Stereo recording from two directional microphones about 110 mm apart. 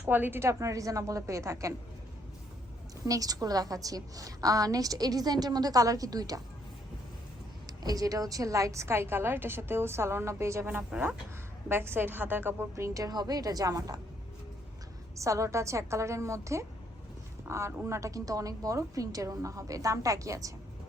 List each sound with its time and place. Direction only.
0.0 s a woman's voice: 15° right (ahead or behind)
3.1 s a woman's voice: 35° right (ahead or behind)
7.7 s a woman's voice: 35° right (ahead or behind)
15.1 s a woman's voice: 30° right (ahead or behind)